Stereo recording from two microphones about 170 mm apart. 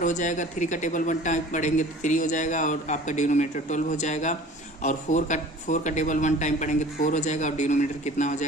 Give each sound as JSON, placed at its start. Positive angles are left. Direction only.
{"t": 0.0, "sound": "speech", "side_deg": 45}